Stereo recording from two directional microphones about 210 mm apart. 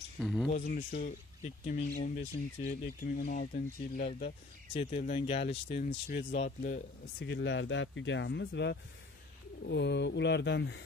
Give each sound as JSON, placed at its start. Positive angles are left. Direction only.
{"t": 0.2, "sound": "speech", "side_deg": 0}
{"t": 0.5, "sound": "speech", "side_deg": 35}
{"t": 4.7, "sound": "speech", "side_deg": 30}